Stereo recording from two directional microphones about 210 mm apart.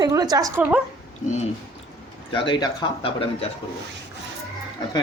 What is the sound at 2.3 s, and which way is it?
Speech, 25° left (ahead or behind).